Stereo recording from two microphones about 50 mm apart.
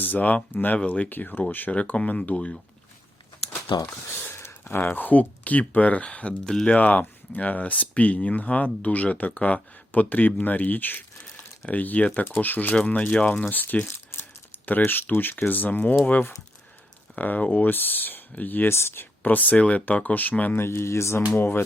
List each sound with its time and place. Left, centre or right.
0.0 s speech: left
1.7 s speech: left
4.6 s speech: left
6.4 s speech: centre
6.7 s speech: left
12.9 s speech: left
14.8 s speech: left
17.2 s speech: left
18.7 s speech: left
19.2 s speech: left
20.6 s speech: left
21.3 s speech: left